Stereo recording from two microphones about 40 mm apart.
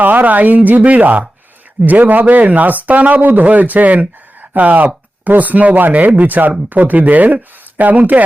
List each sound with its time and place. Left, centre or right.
0.0 s speech: right